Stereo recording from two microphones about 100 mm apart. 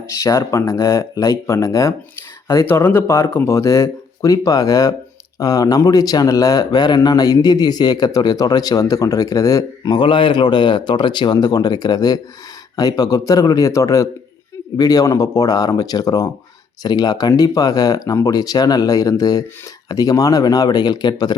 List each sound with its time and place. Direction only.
0.1 s speech: 30° left (ahead or behind)